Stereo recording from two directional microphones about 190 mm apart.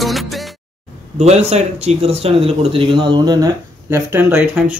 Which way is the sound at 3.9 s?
10° right (ahead or behind).